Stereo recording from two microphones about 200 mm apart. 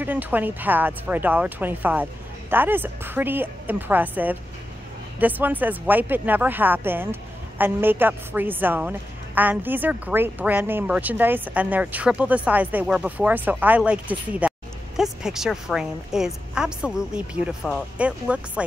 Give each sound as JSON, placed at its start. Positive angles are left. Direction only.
{"t": 0.0, "sound": "a woman's voice", "side_deg": -10}